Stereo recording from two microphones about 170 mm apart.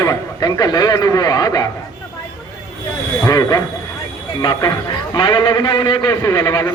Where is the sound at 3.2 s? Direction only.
20° left (ahead or behind).